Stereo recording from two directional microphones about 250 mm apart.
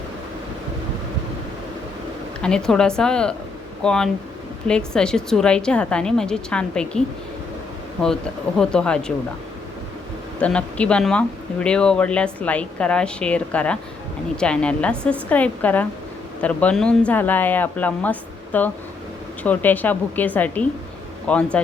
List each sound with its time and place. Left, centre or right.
2.4 s speech: centre
8.0 s speech: centre
10.4 s speech: centre